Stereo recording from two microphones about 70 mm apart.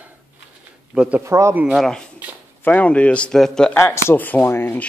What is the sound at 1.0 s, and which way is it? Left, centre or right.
Speech, centre.